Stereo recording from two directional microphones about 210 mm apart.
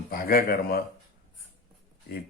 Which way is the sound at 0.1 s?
45° left (ahead or behind).